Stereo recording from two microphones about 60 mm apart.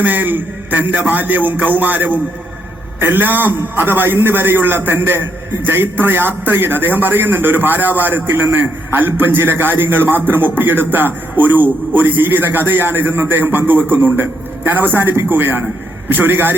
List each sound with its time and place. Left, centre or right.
0.0 s a man's voice: right